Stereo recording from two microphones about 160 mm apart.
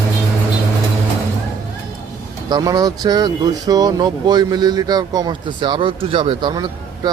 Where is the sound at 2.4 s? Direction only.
25° right (ahead or behind).